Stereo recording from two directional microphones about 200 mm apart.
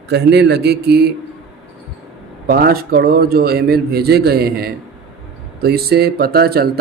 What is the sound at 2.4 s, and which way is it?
Speech, 50° right (ahead or behind).